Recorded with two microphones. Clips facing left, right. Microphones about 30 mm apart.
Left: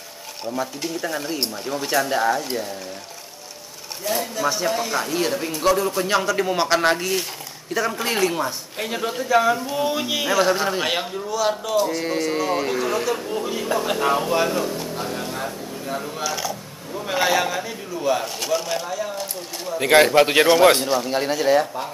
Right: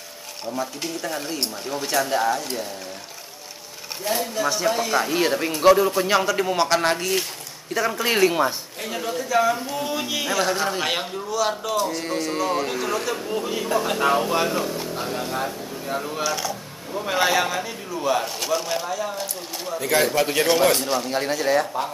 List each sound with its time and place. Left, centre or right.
0.5 s speech: centre
4.1 s speech: centre
5.9 s speech: centre
8.0 s speech: centre
8.7 s a man's voice: left; by 19.8 s centre
19.8 s speech: left
20.8 s speech: centre